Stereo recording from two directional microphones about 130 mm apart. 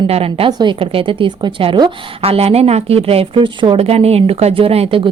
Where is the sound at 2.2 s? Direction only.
50° right (ahead or behind).